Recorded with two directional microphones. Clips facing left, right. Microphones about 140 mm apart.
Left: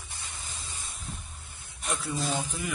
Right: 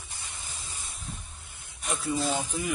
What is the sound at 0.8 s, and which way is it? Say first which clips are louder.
Spray: even; centre (ahead or behind).